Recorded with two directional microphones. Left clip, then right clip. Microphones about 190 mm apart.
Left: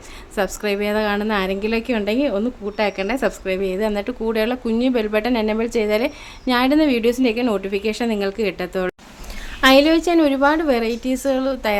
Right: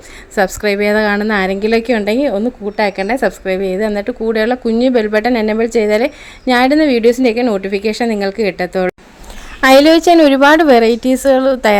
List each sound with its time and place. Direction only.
0.3 s a woman's voice: 25° right (ahead or behind)
9.6 s a woman's voice: 40° right (ahead or behind)